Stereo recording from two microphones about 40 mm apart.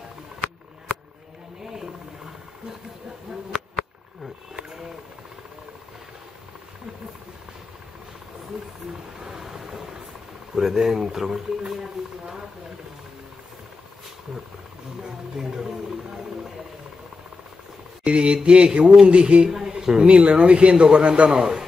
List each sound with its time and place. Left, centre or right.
1.6 s vehicle: centre
9.2 s ocean: centre
10.5 s speech: centre
18.0 s a man's voice: right
20.1 s a man's voice: right